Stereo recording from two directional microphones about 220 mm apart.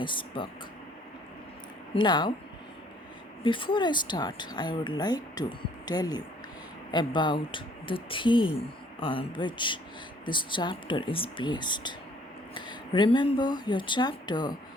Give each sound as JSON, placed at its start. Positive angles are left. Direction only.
{"t": 0.0, "sound": "speech", "side_deg": 20}
{"t": 2.0, "sound": "speech", "side_deg": 20}
{"t": 3.4, "sound": "speech", "side_deg": 20}